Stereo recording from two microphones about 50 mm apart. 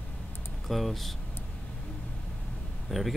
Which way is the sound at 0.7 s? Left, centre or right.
Centre.